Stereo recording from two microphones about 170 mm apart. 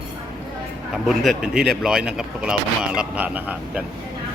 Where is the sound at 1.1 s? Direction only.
5° right (ahead or behind).